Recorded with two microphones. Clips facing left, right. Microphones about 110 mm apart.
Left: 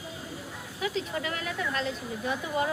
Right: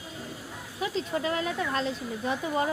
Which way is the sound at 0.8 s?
35° right (ahead or behind).